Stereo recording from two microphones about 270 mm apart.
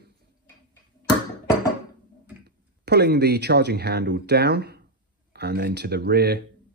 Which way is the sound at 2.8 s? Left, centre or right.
Right.